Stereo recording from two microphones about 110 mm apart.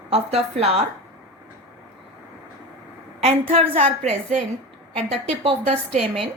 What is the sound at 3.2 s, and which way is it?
Speech, 60° right (ahead or behind).